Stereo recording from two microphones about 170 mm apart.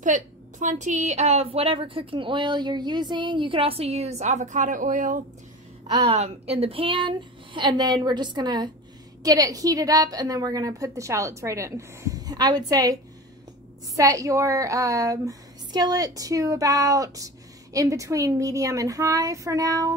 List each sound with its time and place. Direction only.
0.0 s a woman's voice: 45° right (ahead or behind)
6.0 s a woman's voice: 35° right (ahead or behind); by 20.0 s 20° right (ahead or behind)